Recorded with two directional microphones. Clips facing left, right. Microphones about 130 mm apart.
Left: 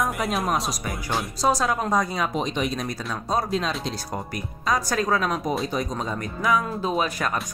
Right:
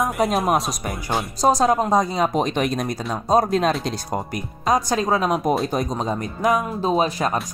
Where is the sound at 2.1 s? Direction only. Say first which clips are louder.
Right 6 dB; 40° right (ahead or behind).